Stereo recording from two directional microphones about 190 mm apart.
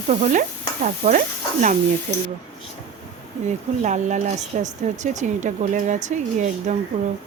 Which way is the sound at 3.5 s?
40° right (ahead or behind).